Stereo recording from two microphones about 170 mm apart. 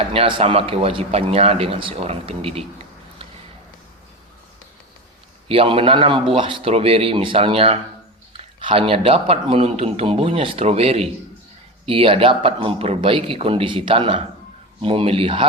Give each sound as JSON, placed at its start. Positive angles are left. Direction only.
{"t": 0.0, "sound": "speech", "side_deg": -30}
{"t": 5.5, "sound": "speech", "side_deg": -30}